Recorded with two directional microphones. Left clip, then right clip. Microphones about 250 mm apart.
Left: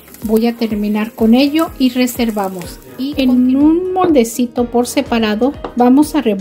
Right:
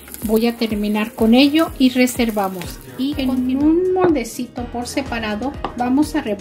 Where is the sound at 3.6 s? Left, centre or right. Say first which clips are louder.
Right 1 dB; left.